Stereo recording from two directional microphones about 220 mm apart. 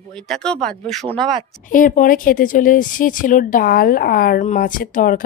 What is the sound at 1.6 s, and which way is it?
Speech, 35° left (ahead or behind).